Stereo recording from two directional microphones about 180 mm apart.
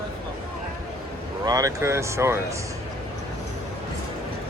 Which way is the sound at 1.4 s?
20° right (ahead or behind).